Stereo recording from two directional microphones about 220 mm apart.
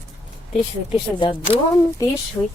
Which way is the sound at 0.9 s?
20° left (ahead or behind).